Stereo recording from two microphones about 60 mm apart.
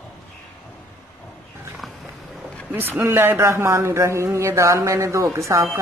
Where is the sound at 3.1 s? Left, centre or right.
Right.